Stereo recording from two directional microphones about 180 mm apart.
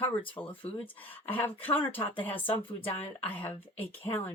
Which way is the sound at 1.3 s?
10° left (ahead or behind).